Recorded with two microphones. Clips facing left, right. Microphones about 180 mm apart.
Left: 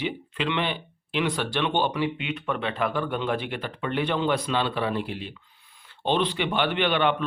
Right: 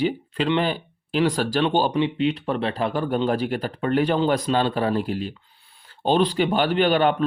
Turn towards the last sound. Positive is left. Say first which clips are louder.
# right 4 dB
turn(degrees=-40)  # may be behind; listen again after turning